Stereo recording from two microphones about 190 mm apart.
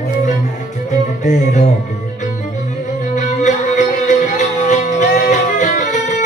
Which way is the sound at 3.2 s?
40° left (ahead or behind).